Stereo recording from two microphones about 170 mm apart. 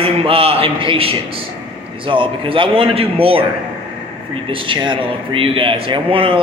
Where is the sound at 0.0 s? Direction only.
35° right (ahead or behind).